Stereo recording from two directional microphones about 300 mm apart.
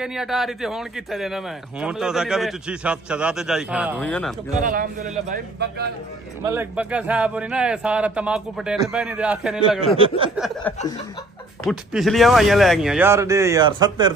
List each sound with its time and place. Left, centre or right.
0.0 s a man's voice: centre
4.6 s a man's voice: right
6.4 s a man's voice: centre
9.9 s speech: centre
10.3 s a man's voice: centre